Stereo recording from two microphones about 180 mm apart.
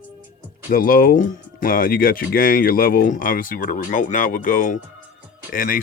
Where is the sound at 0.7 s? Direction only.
50° left (ahead or behind).